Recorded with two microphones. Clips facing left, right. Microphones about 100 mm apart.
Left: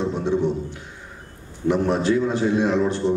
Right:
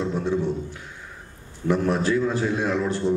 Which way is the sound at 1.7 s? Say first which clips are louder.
Left 2 dB; 25° left (ahead or behind).